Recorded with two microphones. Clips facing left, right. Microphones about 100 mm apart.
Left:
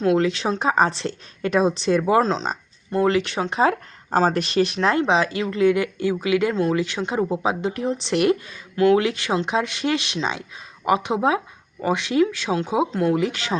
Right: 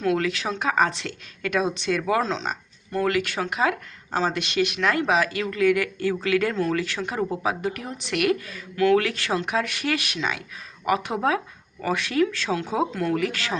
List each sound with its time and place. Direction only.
0.0 s speech: 25° left (ahead or behind)